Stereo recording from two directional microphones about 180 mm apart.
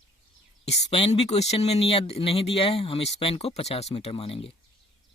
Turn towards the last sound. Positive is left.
turn(degrees=30)  # may be behind; listen again after turning